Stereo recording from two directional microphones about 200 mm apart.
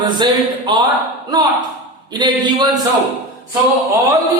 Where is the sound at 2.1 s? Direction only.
20° right (ahead or behind).